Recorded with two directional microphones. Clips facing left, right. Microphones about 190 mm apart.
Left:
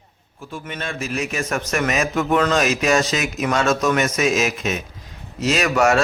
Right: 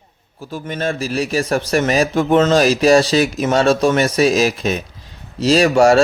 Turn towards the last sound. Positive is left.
turn(degrees=-30)  # may be behind; listen again after turning